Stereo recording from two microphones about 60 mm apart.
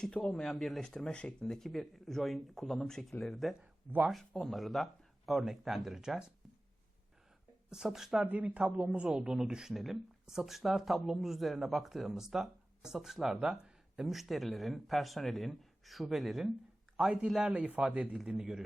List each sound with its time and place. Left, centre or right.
0.0 s speech: centre
0.8 s speech: centre
7.7 s speech: centre
8.2 s speech: right
9.0 s speech: centre
17.8 s speech: centre